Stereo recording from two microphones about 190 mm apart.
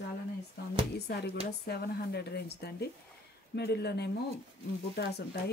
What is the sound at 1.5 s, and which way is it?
Speech, 55° left (ahead or behind).